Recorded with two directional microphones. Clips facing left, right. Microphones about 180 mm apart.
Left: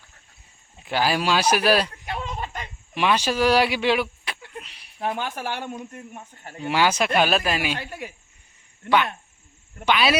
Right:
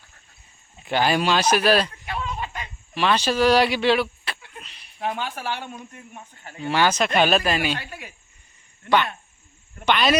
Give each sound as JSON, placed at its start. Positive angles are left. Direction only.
{"t": 0.9, "sound": "speech", "side_deg": 5}
{"t": 2.0, "sound": "a sound", "side_deg": 40}
{"t": 2.9, "sound": "a sound", "side_deg": 10}
{"t": 4.9, "sound": "speech", "side_deg": 45}
{"t": 6.6, "sound": "speech", "side_deg": 10}
{"t": 7.8, "sound": "speech", "side_deg": 45}
{"t": 9.8, "sound": "speech", "side_deg": 5}